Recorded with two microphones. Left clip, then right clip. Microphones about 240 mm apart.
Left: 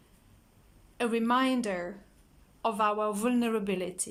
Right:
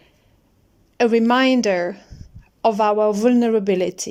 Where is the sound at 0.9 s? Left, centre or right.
Right.